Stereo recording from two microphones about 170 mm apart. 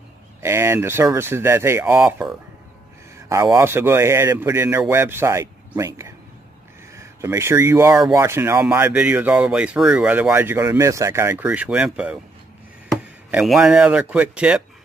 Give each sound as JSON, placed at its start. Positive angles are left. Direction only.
{"t": 0.4, "sound": "speech", "side_deg": -15}
{"t": 3.3, "sound": "speech", "side_deg": -15}
{"t": 13.3, "sound": "speech", "side_deg": -5}